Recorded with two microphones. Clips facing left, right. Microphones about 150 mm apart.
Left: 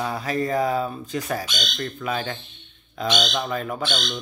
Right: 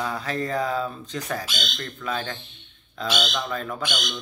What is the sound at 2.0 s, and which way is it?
Speech, 10° left (ahead or behind).